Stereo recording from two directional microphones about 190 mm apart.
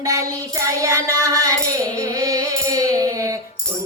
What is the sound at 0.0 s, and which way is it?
Music, 15° right (ahead or behind).